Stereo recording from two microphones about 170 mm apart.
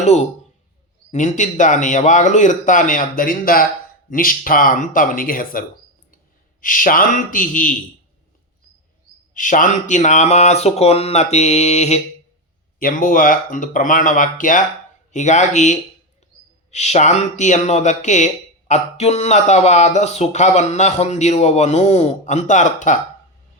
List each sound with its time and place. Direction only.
1.1 s a man's voice: 45° left (ahead or behind)
9.3 s speech: 50° left (ahead or behind)
12.8 s a man's voice: 55° left (ahead or behind)